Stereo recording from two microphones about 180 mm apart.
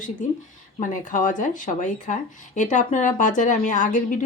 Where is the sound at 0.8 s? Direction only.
45° left (ahead or behind).